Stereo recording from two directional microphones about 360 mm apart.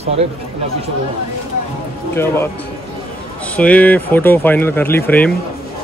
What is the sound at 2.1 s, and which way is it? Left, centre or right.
Speech, centre.